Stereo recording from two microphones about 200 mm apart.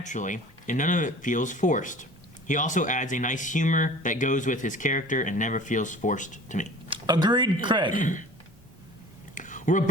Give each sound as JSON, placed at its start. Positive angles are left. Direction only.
{"t": 0.0, "sound": "speech", "side_deg": 40}
{"t": 6.9, "sound": "speech", "side_deg": -20}
{"t": 7.9, "sound": "speech", "side_deg": 40}
{"t": 9.3, "sound": "a sound", "side_deg": 40}